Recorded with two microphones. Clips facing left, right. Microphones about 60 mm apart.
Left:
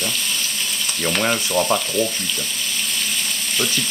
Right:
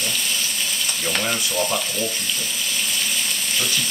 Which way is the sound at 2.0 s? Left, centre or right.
Centre.